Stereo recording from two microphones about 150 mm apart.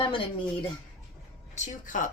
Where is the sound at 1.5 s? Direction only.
55° left (ahead or behind).